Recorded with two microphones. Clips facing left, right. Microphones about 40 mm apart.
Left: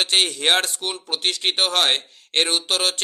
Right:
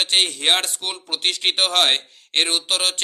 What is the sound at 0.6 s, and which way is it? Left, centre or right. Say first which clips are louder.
Speech: left 2 dB; right.